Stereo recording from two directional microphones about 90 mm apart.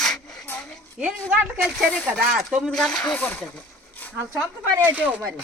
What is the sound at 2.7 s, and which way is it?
Speech, 5° left (ahead or behind).